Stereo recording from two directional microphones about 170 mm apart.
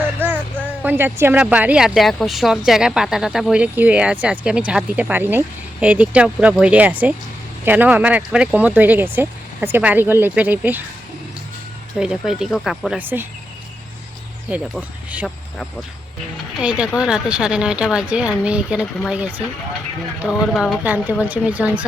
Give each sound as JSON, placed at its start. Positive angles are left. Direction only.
{"t": 0.2, "sound": "music", "side_deg": -10}
{"t": 0.8, "sound": "speech", "side_deg": -10}
{"t": 11.9, "sound": "a woman's voice", "side_deg": -5}
{"t": 14.5, "sound": "speech", "side_deg": -10}
{"t": 16.6, "sound": "a woman's voice", "side_deg": -5}